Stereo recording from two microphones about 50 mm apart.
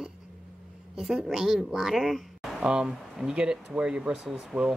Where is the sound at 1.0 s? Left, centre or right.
Centre.